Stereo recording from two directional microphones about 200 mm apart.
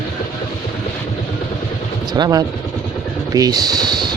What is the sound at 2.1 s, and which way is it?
Speech, 20° right (ahead or behind).